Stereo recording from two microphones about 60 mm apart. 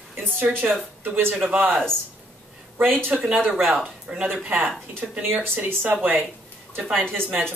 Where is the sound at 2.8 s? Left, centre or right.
Right.